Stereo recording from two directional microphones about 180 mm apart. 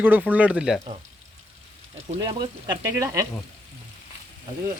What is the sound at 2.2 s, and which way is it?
Speech, 25° right (ahead or behind).